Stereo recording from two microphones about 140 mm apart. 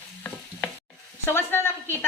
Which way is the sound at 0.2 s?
10° left (ahead or behind).